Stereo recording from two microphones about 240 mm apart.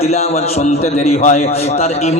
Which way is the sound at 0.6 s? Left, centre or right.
Left.